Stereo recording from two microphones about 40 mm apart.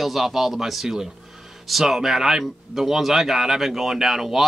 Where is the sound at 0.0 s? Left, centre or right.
Centre.